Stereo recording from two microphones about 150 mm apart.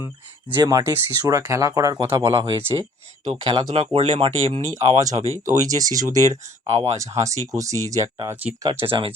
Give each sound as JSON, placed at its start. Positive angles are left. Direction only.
{"t": 0.4, "sound": "speech", "side_deg": -30}
{"t": 3.7, "sound": "speech", "side_deg": -45}
{"t": 4.7, "sound": "speech", "side_deg": -25}
{"t": 8.9, "sound": "speech", "side_deg": -40}